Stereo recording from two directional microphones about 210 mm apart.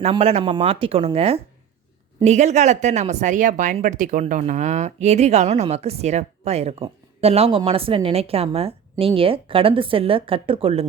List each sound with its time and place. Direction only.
0.0 s a woman's voice: 30° right (ahead or behind)